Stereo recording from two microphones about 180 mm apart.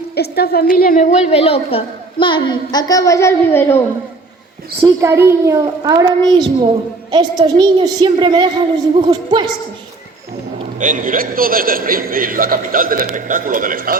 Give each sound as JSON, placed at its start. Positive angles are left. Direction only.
{"t": 0.2, "sound": "a woman's voice", "side_deg": 60}
{"t": 4.9, "sound": "a child's voice", "side_deg": -15}
{"t": 10.8, "sound": "a man's voice", "side_deg": -45}